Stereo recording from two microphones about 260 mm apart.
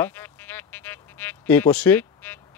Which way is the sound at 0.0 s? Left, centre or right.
Centre.